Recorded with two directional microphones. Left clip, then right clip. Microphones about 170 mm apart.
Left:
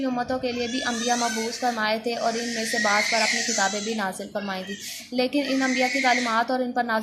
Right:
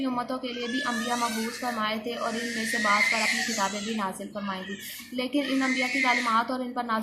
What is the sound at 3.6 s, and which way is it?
Speech, 35° left (ahead or behind).